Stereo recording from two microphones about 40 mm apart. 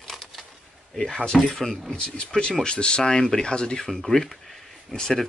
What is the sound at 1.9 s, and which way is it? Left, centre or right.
Speech, left.